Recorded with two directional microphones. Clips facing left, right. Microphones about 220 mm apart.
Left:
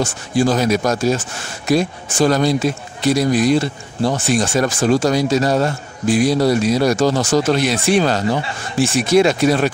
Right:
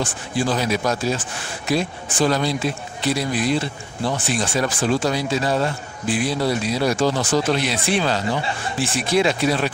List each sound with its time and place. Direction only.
0.0 s a man's voice: 45° left (ahead or behind)